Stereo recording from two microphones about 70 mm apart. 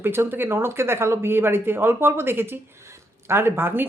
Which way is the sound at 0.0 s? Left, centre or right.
Right.